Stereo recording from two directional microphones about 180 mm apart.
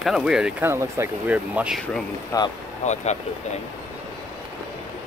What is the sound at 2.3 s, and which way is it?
Speech, 20° left (ahead or behind).